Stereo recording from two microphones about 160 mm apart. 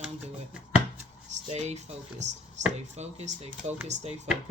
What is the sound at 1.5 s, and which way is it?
Speech, 45° right (ahead or behind).